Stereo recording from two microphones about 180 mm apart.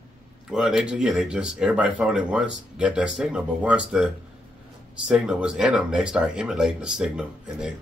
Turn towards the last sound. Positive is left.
turn(degrees=-5)  # may be behind; listen again after turning